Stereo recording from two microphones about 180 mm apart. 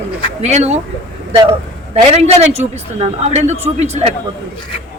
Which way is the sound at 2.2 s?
35° right (ahead or behind).